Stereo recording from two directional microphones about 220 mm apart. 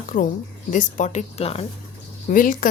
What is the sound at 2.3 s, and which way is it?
Speech, 40° left (ahead or behind).